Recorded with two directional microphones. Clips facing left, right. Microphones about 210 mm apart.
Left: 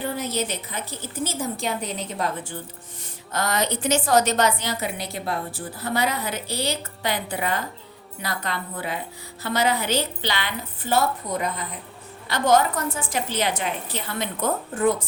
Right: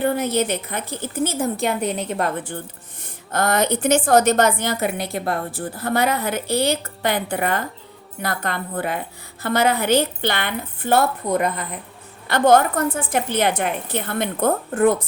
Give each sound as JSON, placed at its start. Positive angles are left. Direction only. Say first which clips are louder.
{"t": 0.0, "sound": "a woman's voice", "louder": "right 7 dB", "side_deg": -60}